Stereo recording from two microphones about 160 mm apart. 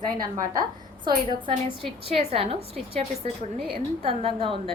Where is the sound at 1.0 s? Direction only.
35° right (ahead or behind).